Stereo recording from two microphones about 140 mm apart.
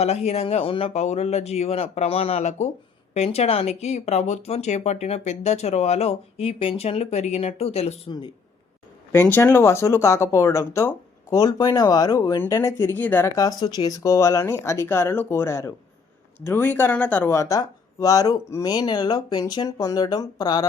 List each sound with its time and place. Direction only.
0.0 s speech: 50° left (ahead or behind)
9.1 s speech: 15° left (ahead or behind)